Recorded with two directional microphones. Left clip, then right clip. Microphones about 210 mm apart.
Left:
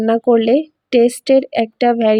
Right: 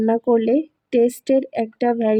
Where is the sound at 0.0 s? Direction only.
20° left (ahead or behind).